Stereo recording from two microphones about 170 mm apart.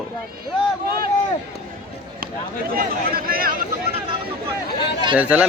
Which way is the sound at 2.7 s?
60° right (ahead or behind).